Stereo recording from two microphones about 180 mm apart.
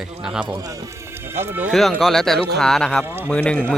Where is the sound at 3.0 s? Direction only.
15° right (ahead or behind).